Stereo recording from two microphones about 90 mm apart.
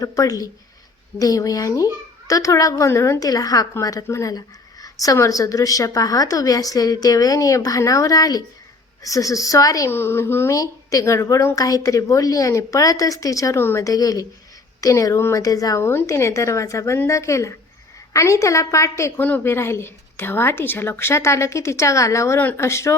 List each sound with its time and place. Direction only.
0.0 s speech: 40° left (ahead or behind)
9.9 s speech: 25° left (ahead or behind)
10.5 s speech: 40° left (ahead or behind)
13.8 s speech: 40° left (ahead or behind)